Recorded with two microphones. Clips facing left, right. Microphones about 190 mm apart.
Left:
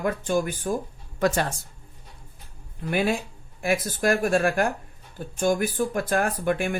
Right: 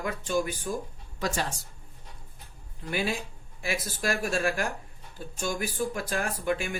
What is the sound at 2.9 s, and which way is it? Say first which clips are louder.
Speech: left 6 dB; 60° left (ahead or behind).